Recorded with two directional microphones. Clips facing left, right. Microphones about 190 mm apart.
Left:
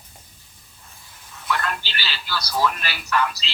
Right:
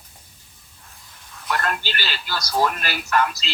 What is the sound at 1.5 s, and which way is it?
Speech, 45° right (ahead or behind).